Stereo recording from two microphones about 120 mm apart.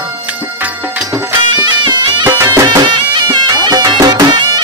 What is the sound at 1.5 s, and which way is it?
Music, 40° right (ahead or behind).